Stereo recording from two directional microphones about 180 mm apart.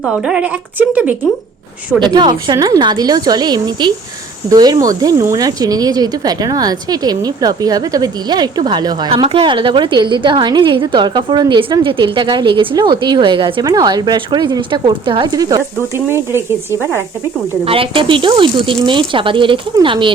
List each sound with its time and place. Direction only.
0.0 s speech: 5° right (ahead or behind)
2.0 s speech: 25° right (ahead or behind)
17.7 s speech: 30° right (ahead or behind)